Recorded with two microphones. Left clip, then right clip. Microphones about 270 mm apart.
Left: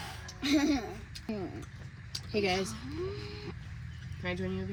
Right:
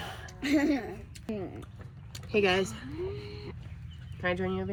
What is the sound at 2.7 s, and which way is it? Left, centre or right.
Speech, centre.